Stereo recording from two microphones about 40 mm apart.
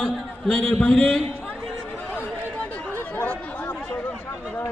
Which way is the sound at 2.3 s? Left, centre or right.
Left.